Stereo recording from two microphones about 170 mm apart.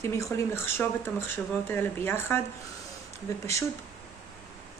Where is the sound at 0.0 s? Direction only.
15° left (ahead or behind).